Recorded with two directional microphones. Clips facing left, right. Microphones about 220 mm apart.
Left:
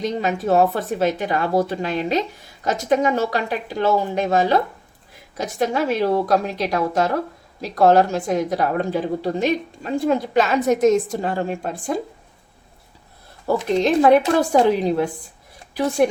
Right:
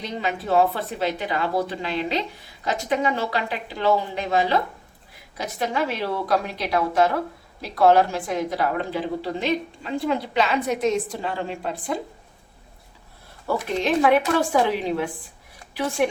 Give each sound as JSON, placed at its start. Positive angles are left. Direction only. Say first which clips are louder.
{"t": 0.0, "sound": "a woman's voice", "louder": "left 6 dB", "side_deg": 45}
{"t": 13.8, "sound": "speech", "louder": "left 4 dB", "side_deg": 40}